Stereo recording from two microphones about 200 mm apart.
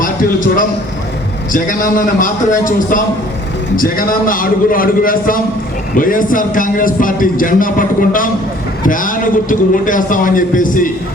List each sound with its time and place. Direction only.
0.0 s a man's voice: 40° left (ahead or behind)